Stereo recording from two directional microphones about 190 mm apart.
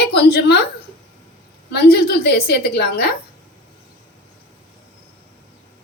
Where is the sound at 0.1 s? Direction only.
55° left (ahead or behind).